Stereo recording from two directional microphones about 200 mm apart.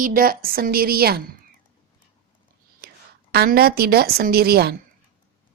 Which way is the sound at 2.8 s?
50° right (ahead or behind).